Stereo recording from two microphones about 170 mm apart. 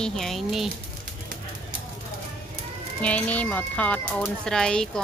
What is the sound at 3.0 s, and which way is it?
Speech, 10° left (ahead or behind).